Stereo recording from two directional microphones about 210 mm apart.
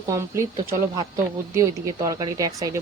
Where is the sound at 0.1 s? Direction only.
15° right (ahead or behind).